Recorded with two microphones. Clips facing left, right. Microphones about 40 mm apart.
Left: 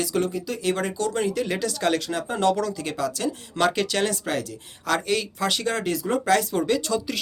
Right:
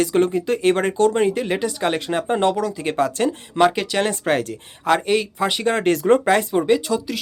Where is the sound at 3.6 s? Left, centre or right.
Right.